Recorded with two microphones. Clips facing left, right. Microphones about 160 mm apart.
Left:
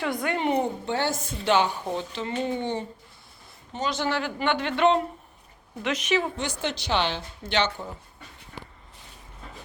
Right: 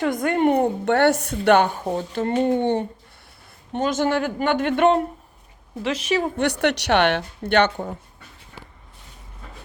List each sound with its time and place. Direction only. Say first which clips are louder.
0.0 s a woman's voice: right 7 dB; 45° right (ahead or behind)
5.8 s a woman's voice: right 3 dB; 30° right (ahead or behind)
6.4 s a woman's voice: right 9 dB; 70° right (ahead or behind)